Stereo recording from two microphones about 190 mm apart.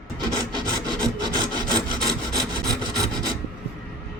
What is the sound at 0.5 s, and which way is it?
Rub, 20° right (ahead or behind).